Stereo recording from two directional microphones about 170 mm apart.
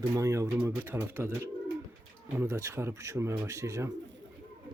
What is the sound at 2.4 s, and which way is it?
Speech, 15° right (ahead or behind).